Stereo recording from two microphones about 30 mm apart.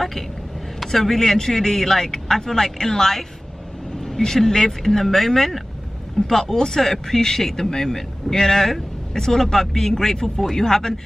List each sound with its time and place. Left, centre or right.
0.7 s speech: centre
4.5 s speech: centre
6.2 s speech: left